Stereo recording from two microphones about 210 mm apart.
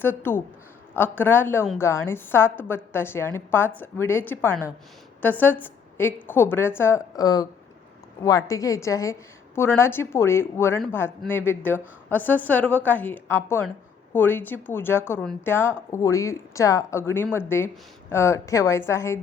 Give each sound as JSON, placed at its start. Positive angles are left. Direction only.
{"t": 0.0, "sound": "a woman's voice", "side_deg": 10}